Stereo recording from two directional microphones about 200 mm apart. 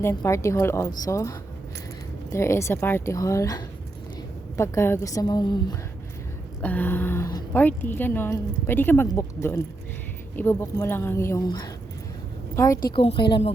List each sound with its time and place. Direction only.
0.0 s speech: 15° left (ahead or behind)
6.6 s a woman's voice: 10° left (ahead or behind)
12.9 s a woman's voice: 25° left (ahead or behind)